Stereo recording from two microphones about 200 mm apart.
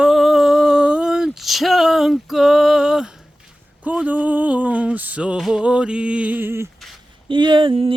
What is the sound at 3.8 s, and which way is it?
Mantra, 5° right (ahead or behind).